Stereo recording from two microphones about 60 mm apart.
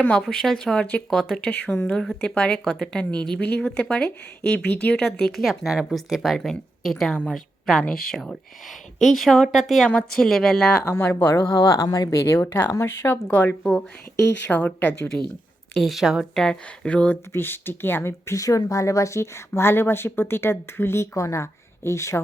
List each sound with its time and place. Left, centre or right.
0.1 s speech: centre
1.5 s speech: centre
4.9 s speech: centre
5.4 s a woman's voice: centre
9.0 s speech: centre
9.9 s speech: centre
10.9 s a woman's voice: left
13.3 s speech: left
15.7 s speech: centre
16.3 s speech: centre
17.3 s speech: left
18.3 s a woman's voice: left